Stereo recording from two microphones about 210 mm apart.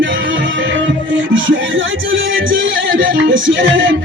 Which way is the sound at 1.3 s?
65° right (ahead or behind).